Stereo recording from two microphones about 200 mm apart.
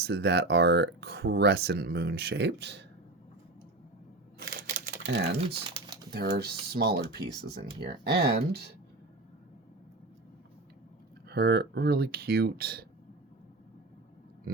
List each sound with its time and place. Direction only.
0.0 s speech: 55° right (ahead or behind)
4.4 s computer keyboard: 50° right (ahead or behind)
6.1 s speech: 55° right (ahead or behind)
11.3 s speech: 50° right (ahead or behind)